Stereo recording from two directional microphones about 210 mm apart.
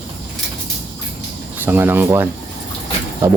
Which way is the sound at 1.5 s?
10° right (ahead or behind).